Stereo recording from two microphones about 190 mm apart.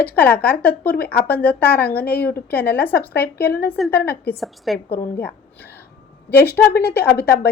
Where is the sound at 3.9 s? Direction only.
55° left (ahead or behind).